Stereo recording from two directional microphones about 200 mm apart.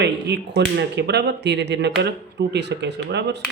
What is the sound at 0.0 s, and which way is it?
Speech, 55° right (ahead or behind).